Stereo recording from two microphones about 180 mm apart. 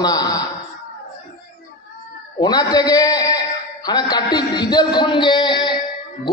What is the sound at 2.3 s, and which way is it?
Speech, 20° left (ahead or behind).